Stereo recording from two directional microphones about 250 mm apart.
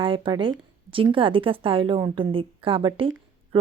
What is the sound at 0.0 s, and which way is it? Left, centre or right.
Speech, right.